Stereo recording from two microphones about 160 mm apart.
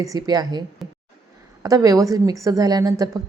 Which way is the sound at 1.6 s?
20° right (ahead or behind).